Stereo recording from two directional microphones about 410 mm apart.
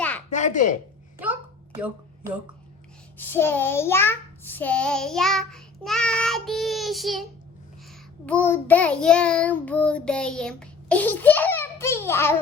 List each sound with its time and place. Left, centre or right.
0.3 s speech: centre
1.2 s a sound: centre
3.2 s a child's voice: centre
8.3 s a child's voice: centre